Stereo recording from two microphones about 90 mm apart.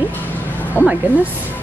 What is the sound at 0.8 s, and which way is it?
Speech, 25° left (ahead or behind).